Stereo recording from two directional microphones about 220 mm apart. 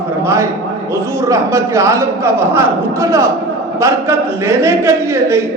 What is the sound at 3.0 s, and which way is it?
Speech, 15° right (ahead or behind).